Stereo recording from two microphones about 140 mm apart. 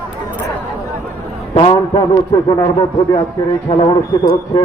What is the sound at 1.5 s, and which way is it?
A man's voice, 35° left (ahead or behind).